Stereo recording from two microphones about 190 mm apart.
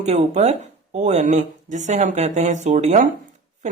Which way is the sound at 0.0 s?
35° right (ahead or behind).